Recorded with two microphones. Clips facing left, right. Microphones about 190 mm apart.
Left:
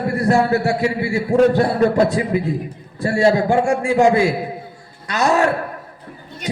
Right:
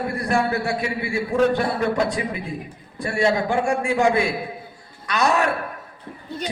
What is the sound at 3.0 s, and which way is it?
A man's voice, 30° left (ahead or behind).